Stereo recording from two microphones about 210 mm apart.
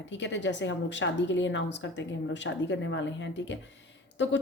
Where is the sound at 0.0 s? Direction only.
60° left (ahead or behind).